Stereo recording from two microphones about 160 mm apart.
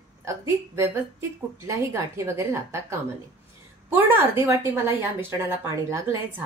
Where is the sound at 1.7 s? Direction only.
15° right (ahead or behind).